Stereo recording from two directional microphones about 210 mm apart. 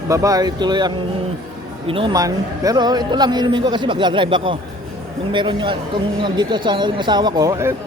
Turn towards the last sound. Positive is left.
turn(degrees=-15)  # may be behind; listen again after turning